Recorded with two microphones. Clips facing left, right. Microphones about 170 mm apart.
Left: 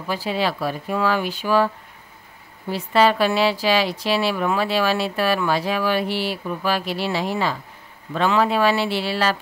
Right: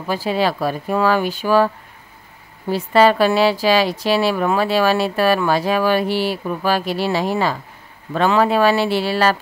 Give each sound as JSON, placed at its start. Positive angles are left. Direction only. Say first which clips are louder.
{"t": 0.0, "sound": "speech", "louder": "right 4 dB", "side_deg": -45}
{"t": 2.7, "sound": "speech", "louder": "right 4 dB", "side_deg": -45}